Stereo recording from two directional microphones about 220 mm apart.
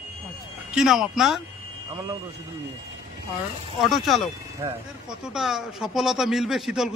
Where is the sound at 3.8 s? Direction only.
Centre (ahead or behind).